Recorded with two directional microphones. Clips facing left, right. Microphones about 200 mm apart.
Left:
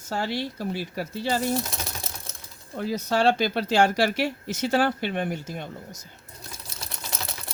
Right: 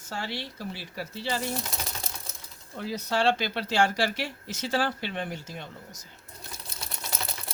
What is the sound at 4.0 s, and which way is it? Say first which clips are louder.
Speech: left 5 dB; 60° left (ahead or behind).